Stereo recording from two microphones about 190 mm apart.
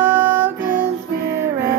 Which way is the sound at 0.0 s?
10° right (ahead or behind).